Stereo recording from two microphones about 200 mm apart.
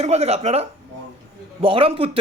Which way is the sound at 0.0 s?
30° right (ahead or behind).